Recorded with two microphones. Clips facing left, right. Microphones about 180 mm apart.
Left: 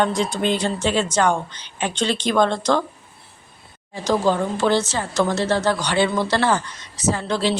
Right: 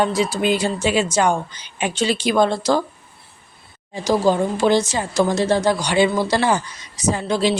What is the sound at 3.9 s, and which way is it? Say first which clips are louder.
Speech: right 2 dB; 10° right (ahead or behind).